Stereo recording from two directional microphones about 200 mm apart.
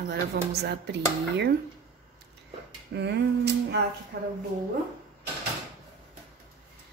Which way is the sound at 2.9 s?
60° right (ahead or behind).